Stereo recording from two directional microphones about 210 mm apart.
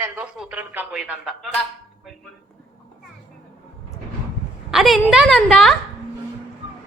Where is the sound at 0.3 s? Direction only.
5° right (ahead or behind).